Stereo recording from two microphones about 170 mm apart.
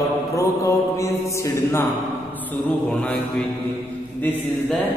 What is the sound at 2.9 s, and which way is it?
Mantra, 5° left (ahead or behind).